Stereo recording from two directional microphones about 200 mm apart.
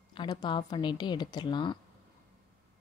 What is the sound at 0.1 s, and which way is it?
A woman's voice, 20° left (ahead or behind).